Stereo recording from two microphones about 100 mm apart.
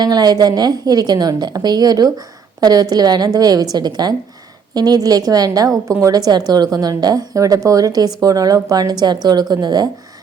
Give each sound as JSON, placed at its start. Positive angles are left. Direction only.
{"t": 0.0, "sound": "a woman's voice", "side_deg": -45}